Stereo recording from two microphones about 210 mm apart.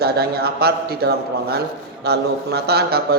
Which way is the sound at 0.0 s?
50° right (ahead or behind).